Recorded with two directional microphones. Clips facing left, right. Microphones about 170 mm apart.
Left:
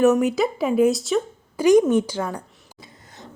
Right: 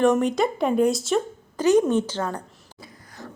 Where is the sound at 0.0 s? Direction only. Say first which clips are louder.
Left 2 dB; 5° left (ahead or behind).